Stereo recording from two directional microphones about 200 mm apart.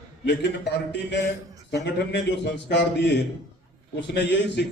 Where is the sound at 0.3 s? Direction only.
60° left (ahead or behind).